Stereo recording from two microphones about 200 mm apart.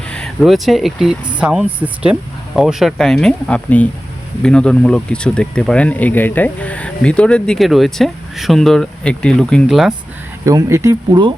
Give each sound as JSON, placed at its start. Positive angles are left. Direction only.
{"t": 0.1, "sound": "speech", "side_deg": 0}
{"t": 10.4, "sound": "speech", "side_deg": -15}